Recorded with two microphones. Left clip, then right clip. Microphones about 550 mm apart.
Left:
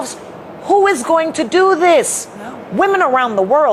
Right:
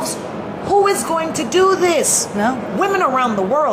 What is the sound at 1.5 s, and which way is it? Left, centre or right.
Speech, left.